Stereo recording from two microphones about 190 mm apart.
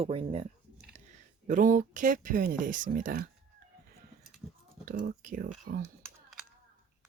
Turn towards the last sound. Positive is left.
turn(degrees=-50)  # may be behind; listen again after turning